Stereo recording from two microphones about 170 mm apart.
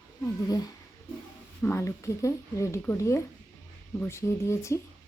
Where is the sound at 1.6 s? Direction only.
15° left (ahead or behind).